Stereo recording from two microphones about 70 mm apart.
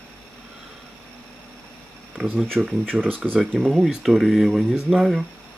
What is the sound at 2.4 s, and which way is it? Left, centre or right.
Speech, centre.